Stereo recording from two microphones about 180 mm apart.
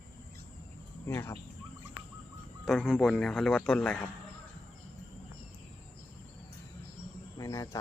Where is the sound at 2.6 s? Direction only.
Centre (ahead or behind).